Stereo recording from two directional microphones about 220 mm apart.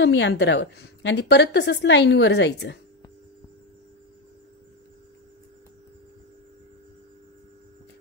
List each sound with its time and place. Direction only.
0.0 s a woman's voice: 55° left (ahead or behind)